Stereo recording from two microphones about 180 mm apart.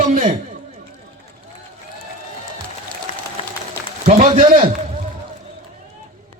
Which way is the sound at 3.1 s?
40° left (ahead or behind).